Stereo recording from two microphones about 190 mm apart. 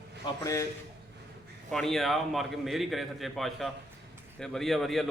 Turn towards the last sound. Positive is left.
turn(degrees=0)  # may be behind; listen again after turning